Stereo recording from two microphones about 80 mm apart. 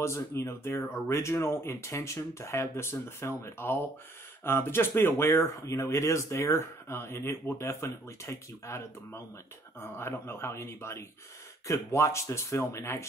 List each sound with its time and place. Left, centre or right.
0.0 s speech: left